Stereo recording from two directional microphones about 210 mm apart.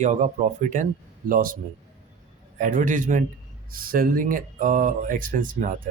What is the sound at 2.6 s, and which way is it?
A man's voice, 40° right (ahead or behind).